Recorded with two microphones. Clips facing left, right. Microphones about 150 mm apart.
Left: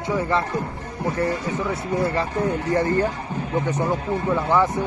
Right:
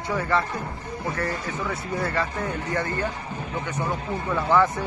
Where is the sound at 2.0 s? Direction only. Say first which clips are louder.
Left 3 dB; 25° left (ahead or behind).